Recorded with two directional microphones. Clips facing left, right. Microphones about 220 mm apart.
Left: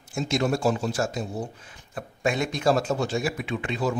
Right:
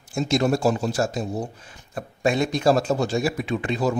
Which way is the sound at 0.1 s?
40° right (ahead or behind).